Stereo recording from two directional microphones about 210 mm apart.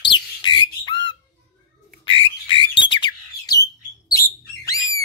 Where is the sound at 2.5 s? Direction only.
25° left (ahead or behind).